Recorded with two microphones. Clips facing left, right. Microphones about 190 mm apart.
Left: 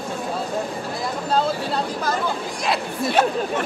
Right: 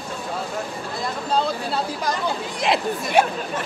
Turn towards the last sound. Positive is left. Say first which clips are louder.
# right 1 dB
turn(degrees=-25)  # may be behind; listen again after turning